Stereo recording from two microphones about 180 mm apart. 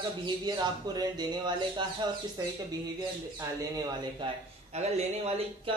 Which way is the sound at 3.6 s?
20° right (ahead or behind).